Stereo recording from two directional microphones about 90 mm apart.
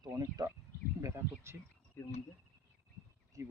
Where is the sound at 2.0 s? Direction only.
25° left (ahead or behind).